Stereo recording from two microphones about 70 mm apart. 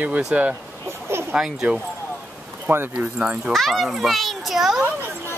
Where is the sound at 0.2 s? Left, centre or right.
Centre.